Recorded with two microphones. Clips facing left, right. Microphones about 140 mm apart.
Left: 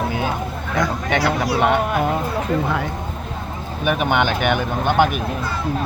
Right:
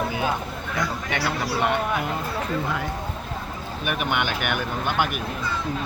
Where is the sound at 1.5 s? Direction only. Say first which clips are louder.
Left 5 dB; 90° left.